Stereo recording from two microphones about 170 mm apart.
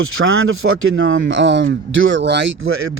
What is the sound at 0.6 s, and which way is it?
A man's voice, 90° right.